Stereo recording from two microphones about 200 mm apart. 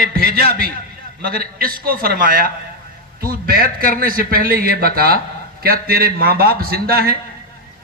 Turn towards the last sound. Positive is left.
turn(degrees=-50)  # may be behind; listen again after turning